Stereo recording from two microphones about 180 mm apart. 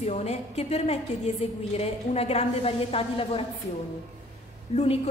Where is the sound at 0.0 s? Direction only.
40° left (ahead or behind).